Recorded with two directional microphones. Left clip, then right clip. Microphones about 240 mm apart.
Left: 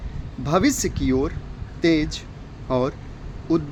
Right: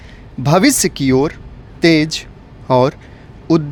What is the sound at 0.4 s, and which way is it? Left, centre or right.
Speech, right.